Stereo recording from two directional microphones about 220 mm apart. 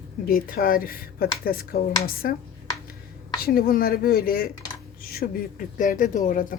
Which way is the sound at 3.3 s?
45° left (ahead or behind).